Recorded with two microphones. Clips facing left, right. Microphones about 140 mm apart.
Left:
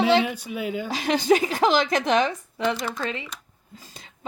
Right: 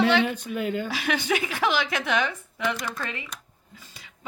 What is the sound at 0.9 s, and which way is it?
A woman's voice, 35° left (ahead or behind).